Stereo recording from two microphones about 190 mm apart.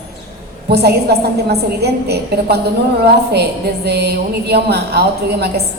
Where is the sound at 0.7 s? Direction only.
60° right (ahead or behind).